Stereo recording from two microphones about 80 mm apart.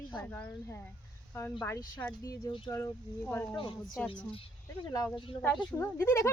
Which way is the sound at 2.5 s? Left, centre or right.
Left.